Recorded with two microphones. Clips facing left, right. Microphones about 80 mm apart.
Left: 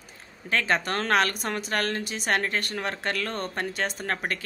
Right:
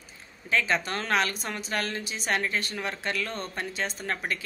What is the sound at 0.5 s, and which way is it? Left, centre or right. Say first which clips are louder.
Speech: left 1 dB; left.